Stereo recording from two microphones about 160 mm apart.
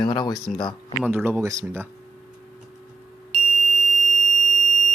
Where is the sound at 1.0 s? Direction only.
10° right (ahead or behind).